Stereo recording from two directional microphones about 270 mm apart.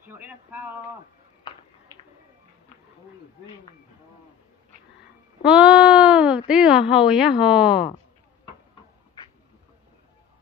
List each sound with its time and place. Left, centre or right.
0.0 s speech: centre
5.4 s speech: centre